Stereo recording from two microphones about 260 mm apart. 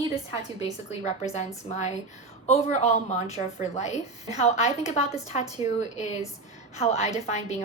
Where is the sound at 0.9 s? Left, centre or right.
Left.